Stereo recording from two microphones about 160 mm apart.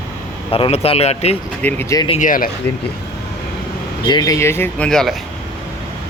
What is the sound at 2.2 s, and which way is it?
Speech, 60° left (ahead or behind).